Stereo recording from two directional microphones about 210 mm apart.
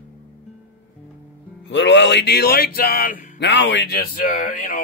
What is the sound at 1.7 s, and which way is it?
Speech, 60° left (ahead or behind).